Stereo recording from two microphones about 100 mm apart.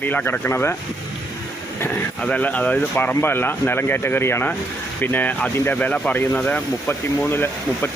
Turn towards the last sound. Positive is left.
turn(degrees=20)  # may be behind; listen again after turning